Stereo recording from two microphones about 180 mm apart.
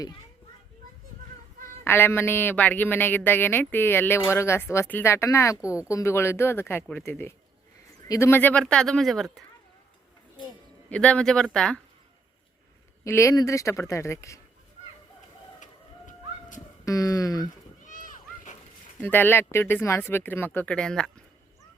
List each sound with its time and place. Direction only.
1.8 s speech: 15° left (ahead or behind)
10.8 s speech: 5° left (ahead or behind)
13.1 s speech: 15° left (ahead or behind)
15.6 s bird: 45° left (ahead or behind)
16.8 s speech: 20° left (ahead or behind)
17.8 s a sound: 45° left (ahead or behind)
19.0 s speech: 10° left (ahead or behind)